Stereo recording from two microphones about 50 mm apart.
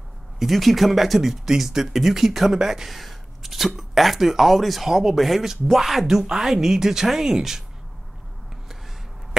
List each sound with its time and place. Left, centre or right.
0.4 s a woman's voice: centre